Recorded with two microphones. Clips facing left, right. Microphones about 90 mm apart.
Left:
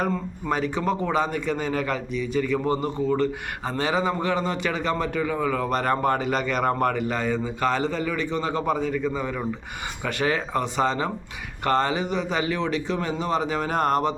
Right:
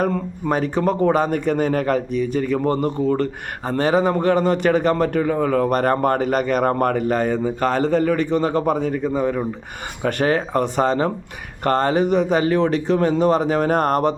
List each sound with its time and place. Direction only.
0.0 s a man's voice: 45° right (ahead or behind)